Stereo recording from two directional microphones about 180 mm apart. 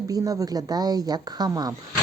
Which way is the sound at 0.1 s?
20° right (ahead or behind).